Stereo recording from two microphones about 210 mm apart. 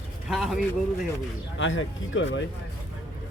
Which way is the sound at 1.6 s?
65° left (ahead or behind).